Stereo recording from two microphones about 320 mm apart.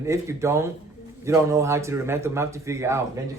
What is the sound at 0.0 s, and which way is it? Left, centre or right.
Speech, centre.